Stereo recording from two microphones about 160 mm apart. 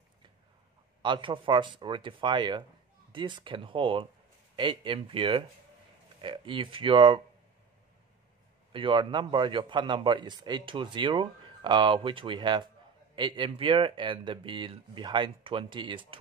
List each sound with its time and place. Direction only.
1.0 s a man's voice: 30° right (ahead or behind)
8.7 s a man's voice: 30° right (ahead or behind)